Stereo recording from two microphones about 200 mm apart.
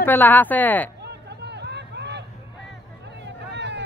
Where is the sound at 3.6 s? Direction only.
60° right (ahead or behind).